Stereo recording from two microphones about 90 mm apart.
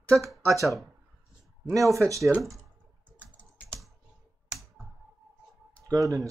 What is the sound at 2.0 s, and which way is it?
Speech, 35° right (ahead or behind).